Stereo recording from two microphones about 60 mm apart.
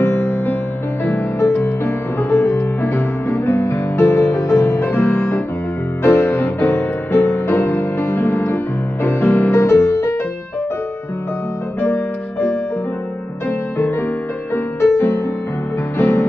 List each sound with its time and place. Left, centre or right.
0.0 s music: left
2.3 s music: left
4.8 s music: left
14.5 s music: left